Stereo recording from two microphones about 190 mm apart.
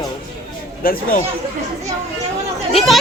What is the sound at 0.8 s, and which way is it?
Speech, 50° left (ahead or behind).